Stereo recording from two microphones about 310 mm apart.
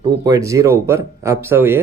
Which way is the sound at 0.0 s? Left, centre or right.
Centre.